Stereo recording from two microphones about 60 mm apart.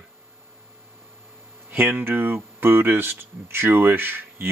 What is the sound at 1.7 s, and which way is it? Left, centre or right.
Speech, right.